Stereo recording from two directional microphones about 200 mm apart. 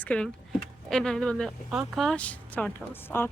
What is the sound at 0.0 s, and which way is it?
A woman's voice, 5° left (ahead or behind).